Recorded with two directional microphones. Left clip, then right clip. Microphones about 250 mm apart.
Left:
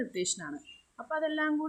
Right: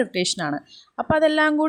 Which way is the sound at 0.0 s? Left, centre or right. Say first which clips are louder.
Right 12 dB; right.